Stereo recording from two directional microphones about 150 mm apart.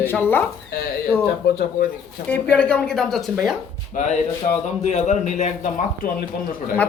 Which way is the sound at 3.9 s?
55° left (ahead or behind).